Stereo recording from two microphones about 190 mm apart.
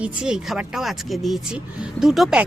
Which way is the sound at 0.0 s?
5° right (ahead or behind).